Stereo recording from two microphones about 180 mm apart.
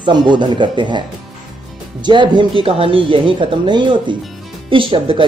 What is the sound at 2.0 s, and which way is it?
Speech, 25° right (ahead or behind).